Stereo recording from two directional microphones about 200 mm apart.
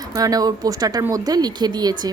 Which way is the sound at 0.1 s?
15° right (ahead or behind).